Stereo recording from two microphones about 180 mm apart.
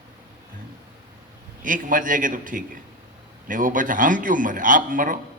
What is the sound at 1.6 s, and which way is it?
A man's voice, 50° right (ahead or behind).